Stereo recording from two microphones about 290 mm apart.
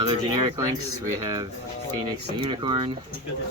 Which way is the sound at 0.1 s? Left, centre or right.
Centre.